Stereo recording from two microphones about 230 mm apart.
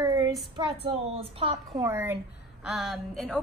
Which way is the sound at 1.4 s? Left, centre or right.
Right.